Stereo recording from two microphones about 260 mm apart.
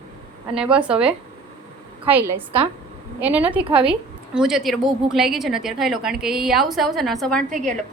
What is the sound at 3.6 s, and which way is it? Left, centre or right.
Speech, right.